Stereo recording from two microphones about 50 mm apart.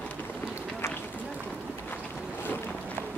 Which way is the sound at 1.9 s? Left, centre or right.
Left.